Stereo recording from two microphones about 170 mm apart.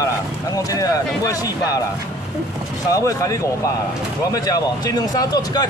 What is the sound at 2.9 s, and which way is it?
Speech, 20° left (ahead or behind).